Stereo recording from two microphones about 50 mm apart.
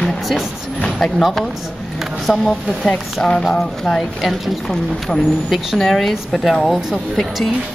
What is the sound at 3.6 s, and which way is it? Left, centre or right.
A woman's voice, centre.